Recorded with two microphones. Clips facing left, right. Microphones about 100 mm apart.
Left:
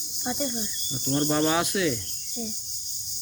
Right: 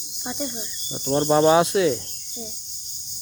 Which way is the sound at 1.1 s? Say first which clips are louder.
Right 7 dB; 25° right (ahead or behind).